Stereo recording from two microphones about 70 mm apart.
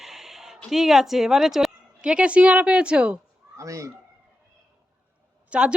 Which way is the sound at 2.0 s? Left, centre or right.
Centre.